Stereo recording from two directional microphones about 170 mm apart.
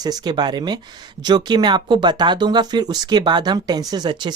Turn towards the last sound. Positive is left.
turn(degrees=-25)  # may be behind; listen again after turning